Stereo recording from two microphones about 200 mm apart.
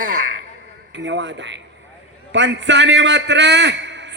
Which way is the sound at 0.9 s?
65° right (ahead or behind).